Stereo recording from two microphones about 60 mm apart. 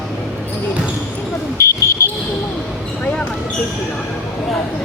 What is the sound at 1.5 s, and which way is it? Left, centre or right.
Smoke detector, left.